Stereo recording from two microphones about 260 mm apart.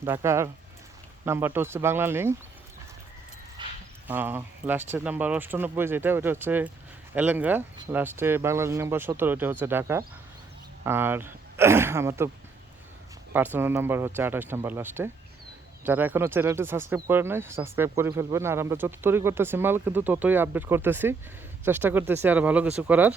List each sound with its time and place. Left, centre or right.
0.0 s speech: centre
3.6 s a sound: centre
4.0 s speech: centre
13.3 s speech: centre